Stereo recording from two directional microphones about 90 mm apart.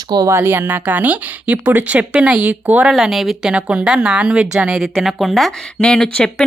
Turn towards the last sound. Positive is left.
turn(degrees=10)  # may be behind; listen again after turning